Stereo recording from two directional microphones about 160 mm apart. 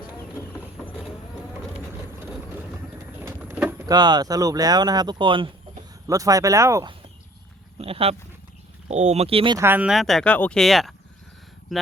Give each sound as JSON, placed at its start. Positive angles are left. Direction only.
{"t": 3.2, "sound": "vehicle", "side_deg": -10}
{"t": 3.8, "sound": "speech", "side_deg": -25}
{"t": 7.8, "sound": "speech", "side_deg": -35}
{"t": 9.6, "sound": "speech", "side_deg": -10}